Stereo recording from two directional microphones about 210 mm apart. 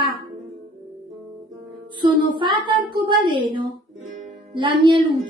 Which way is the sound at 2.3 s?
20° right (ahead or behind).